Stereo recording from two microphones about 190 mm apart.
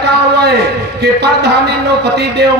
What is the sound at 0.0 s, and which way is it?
A man's voice, 60° right (ahead or behind).